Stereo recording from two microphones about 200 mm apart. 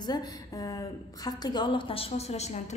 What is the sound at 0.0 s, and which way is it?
A woman's voice, 20° left (ahead or behind).